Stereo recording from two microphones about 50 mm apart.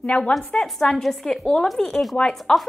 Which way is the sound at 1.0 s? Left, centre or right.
Centre.